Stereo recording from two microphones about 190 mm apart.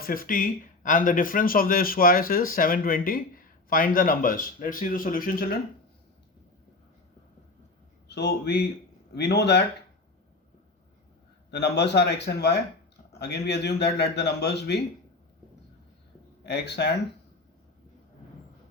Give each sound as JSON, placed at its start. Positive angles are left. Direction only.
{"t": 0.0, "sound": "speech", "side_deg": 50}
{"t": 8.0, "sound": "a man's voice", "side_deg": 65}
{"t": 11.5, "sound": "a man's voice", "side_deg": 65}
{"t": 16.5, "sound": "a man's voice", "side_deg": 65}